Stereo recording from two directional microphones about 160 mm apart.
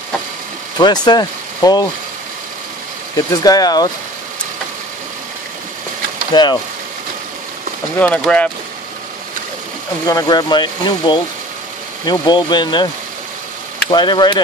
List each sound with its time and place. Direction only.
0.7 s speech: 25° left (ahead or behind)
3.2 s speech: 25° left (ahead or behind)
6.3 s speech: 25° left (ahead or behind)
8.0 s speech: 10° left (ahead or behind)
10.0 s speech: 25° left (ahead or behind)